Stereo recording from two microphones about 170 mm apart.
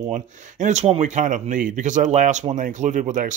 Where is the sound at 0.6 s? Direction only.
40° right (ahead or behind).